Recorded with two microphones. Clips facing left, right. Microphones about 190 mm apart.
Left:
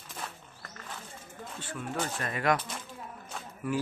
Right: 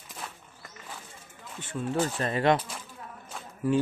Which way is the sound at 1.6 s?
25° right (ahead or behind).